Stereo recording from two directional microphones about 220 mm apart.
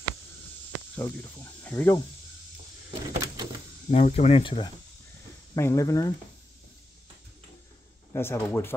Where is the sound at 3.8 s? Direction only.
30° left (ahead or behind); by 6.0 s 15° left (ahead or behind).